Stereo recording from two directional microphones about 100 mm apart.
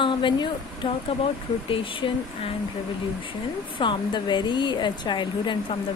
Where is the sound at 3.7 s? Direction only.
50° left (ahead or behind).